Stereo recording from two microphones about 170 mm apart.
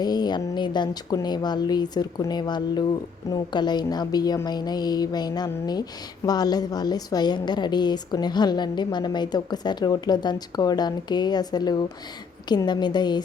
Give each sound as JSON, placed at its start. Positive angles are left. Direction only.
{"t": 0.0, "sound": "a woman's voice", "side_deg": 25}